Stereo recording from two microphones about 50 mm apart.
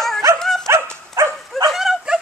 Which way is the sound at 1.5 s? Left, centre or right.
Centre.